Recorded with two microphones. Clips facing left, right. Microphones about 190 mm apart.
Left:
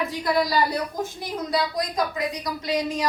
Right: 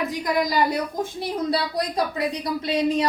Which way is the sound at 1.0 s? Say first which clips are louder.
Right 3 dB; 30° right (ahead or behind).